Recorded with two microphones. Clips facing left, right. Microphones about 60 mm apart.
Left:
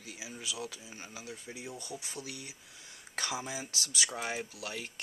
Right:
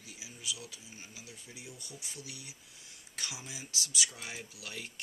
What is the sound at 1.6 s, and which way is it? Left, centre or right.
Speech, left.